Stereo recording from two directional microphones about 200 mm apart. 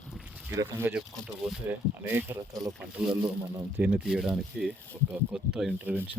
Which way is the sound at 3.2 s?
20° right (ahead or behind).